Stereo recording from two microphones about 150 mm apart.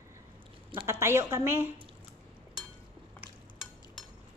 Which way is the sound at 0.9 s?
20° right (ahead or behind).